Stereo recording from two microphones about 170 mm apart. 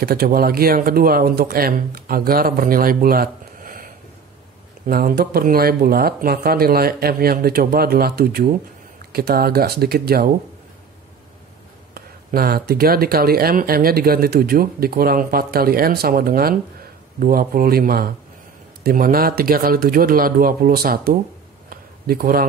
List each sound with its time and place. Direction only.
0.0 s speech: 60° right (ahead or behind)
11.9 s speech: 60° right (ahead or behind)
21.6 s a sound: 60° right (ahead or behind)